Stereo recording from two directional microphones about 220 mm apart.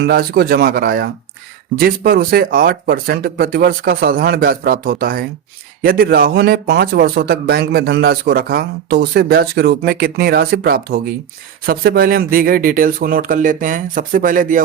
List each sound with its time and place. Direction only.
0.0 s speech: 45° right (ahead or behind)